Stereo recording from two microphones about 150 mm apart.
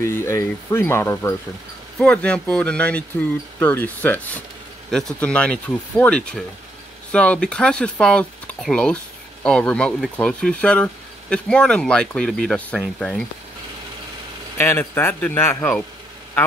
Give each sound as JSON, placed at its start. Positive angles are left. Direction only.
{"t": 0.0, "sound": "speech", "side_deg": 15}
{"t": 2.0, "sound": "speech", "side_deg": 5}
{"t": 14.6, "sound": "speech", "side_deg": 15}